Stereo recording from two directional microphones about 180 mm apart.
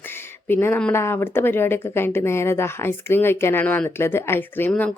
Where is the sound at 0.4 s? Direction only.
10° left (ahead or behind).